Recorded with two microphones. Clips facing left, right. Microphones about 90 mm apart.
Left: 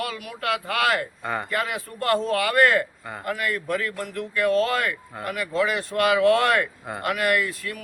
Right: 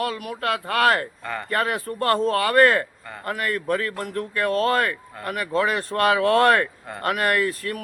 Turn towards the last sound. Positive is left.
turn(degrees=-45)  # may be behind; listen again after turning